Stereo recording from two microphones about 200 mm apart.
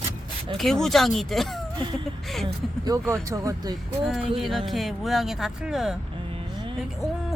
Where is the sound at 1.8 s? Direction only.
25° right (ahead or behind).